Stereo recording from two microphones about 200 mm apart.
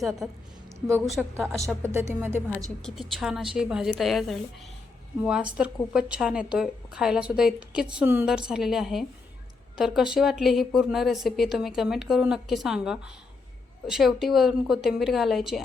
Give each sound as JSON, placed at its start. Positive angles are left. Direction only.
{"t": 0.2, "sound": "a woman's voice", "side_deg": 0}
{"t": 1.8, "sound": "speech", "side_deg": -10}
{"t": 2.6, "sound": "a woman's voice", "side_deg": 0}